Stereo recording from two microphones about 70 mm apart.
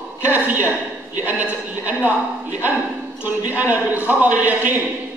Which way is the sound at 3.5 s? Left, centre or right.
Right.